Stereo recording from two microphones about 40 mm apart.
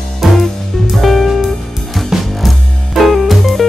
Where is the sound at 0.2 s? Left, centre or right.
Centre.